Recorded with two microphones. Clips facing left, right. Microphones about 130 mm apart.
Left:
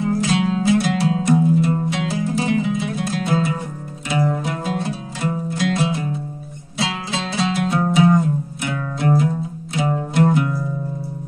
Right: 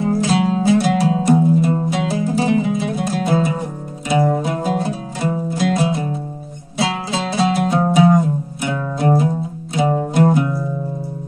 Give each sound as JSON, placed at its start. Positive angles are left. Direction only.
{"t": 0.0, "sound": "music", "side_deg": -35}